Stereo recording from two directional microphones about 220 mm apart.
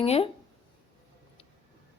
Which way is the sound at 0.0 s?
25° left (ahead or behind).